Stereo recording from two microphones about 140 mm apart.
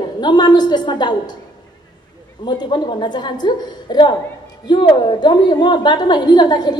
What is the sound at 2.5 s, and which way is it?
A woman's voice, 30° left (ahead or behind).